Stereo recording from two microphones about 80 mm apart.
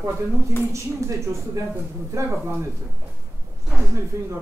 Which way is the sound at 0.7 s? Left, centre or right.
Right.